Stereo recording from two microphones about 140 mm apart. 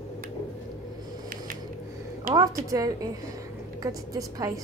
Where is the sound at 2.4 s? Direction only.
25° right (ahead or behind).